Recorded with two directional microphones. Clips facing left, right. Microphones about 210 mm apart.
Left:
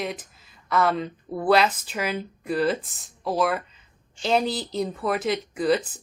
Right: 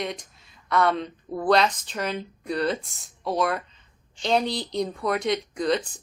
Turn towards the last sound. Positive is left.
turn(degrees=5)  # may be behind; listen again after turning